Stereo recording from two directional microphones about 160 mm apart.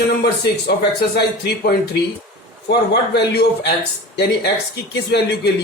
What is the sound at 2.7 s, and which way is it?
A man's voice, 90° left.